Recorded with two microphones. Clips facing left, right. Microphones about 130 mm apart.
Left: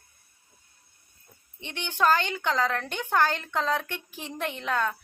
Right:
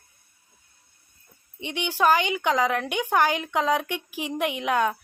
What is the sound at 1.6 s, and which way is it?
A woman's voice, 10° right (ahead or behind).